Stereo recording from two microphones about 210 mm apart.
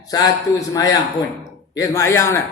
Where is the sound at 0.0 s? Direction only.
15° left (ahead or behind).